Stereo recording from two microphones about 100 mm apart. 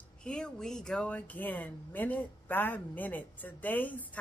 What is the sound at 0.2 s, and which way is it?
Speech, 10° left (ahead or behind).